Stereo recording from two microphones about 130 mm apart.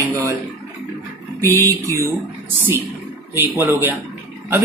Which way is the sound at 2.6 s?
20° right (ahead or behind).